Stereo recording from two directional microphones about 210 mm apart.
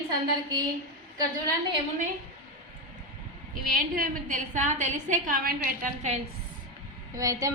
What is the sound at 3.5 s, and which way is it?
A woman's voice, 45° right (ahead or behind).